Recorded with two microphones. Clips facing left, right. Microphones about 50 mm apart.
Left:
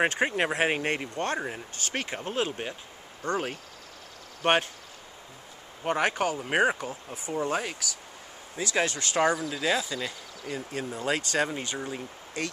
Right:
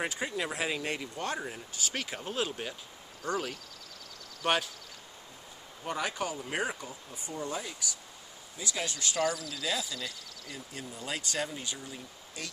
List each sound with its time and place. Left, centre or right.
0.0 s speech: left
2.1 s speech: left
5.9 s speech: left
6.3 s speech: left
7.2 s speech: left